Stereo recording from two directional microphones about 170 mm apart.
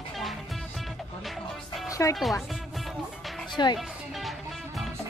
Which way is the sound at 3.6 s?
25° left (ahead or behind).